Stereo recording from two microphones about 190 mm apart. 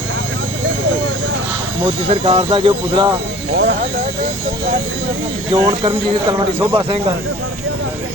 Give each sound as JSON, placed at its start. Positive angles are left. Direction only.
{"t": 1.8, "sound": "speech", "side_deg": -25}
{"t": 5.5, "sound": "speech", "side_deg": -25}
{"t": 6.6, "sound": "speech", "side_deg": -10}